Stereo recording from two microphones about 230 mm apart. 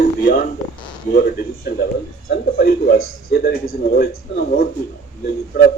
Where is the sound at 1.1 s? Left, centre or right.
Left.